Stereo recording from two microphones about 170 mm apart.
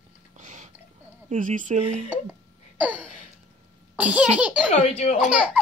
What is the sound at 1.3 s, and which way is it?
Speech, 50° right (ahead or behind).